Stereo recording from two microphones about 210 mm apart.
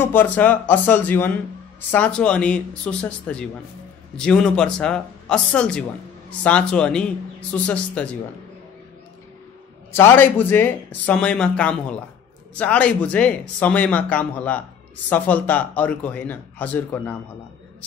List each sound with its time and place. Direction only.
0.0 s speech: 10° left (ahead or behind)
9.9 s speech: 10° left (ahead or behind)